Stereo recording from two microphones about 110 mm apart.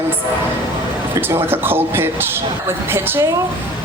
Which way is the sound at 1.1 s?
20° right (ahead or behind).